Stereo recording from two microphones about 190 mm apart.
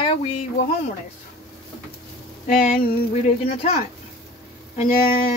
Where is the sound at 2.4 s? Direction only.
45° left (ahead or behind).